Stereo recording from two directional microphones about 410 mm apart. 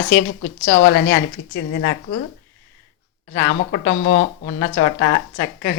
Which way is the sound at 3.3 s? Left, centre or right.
Left.